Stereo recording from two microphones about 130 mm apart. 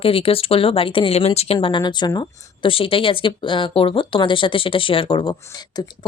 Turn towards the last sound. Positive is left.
turn(degrees=35)  # may be behind; listen again after turning